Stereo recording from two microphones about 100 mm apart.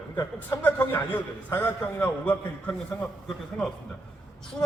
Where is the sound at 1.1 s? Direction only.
20° left (ahead or behind).